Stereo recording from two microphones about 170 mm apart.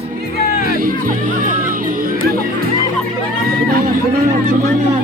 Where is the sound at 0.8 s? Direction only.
55° right (ahead or behind).